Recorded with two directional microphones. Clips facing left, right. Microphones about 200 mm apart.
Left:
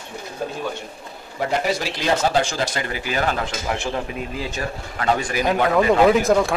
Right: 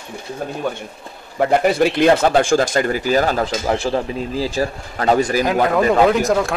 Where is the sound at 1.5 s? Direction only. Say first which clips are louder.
Right 8 dB; 55° right (ahead or behind); by 5.4 s 35° right (ahead or behind).